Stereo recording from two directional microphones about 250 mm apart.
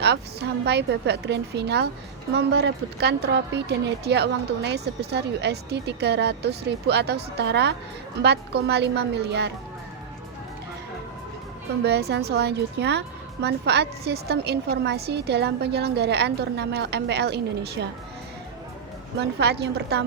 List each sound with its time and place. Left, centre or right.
0.0 s a woman's voice: right
11.8 s a woman's voice: right
19.2 s a woman's voice: right